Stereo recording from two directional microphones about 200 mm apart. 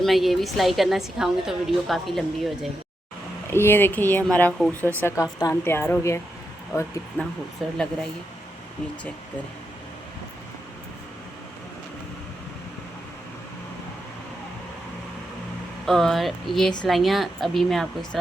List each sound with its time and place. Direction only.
0.0 s a woman's voice: centre (ahead or behind)
3.5 s speech: 10° left (ahead or behind)
4.8 s speech: 10° right (ahead or behind)
5.0 s a woman's voice: 15° left (ahead or behind); by 7.8 s centre (ahead or behind)
15.9 s a woman's voice: centre (ahead or behind)